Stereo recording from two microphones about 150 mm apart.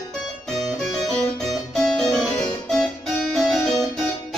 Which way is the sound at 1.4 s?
Centre (ahead or behind).